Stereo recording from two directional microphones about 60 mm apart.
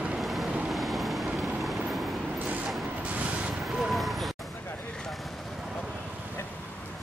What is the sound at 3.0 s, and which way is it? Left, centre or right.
Vehicle, right.